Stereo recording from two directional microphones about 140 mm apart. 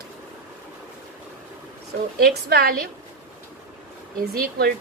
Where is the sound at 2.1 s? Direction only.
90° right.